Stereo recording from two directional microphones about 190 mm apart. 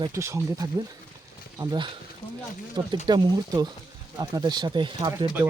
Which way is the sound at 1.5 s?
25° right (ahead or behind).